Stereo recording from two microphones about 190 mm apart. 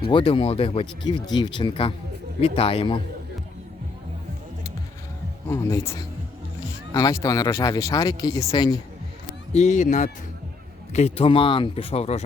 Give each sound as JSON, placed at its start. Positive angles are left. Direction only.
{"t": 0.1, "sound": "speech", "side_deg": 25}
{"t": 5.5, "sound": "speech", "side_deg": 15}
{"t": 9.5, "sound": "speech", "side_deg": 35}